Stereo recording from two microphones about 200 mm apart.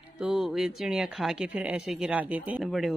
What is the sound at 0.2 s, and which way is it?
Speech, centre (ahead or behind).